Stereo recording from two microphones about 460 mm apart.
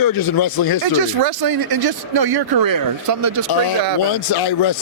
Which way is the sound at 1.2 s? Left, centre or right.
Right.